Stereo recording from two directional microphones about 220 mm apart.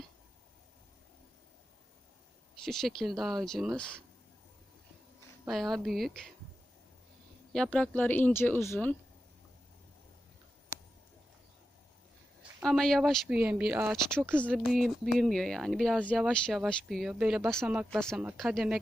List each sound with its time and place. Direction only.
2.6 s speech: centre (ahead or behind)
5.5 s speech: centre (ahead or behind)
7.5 s speech: 5° left (ahead or behind)
12.6 s speech: centre (ahead or behind)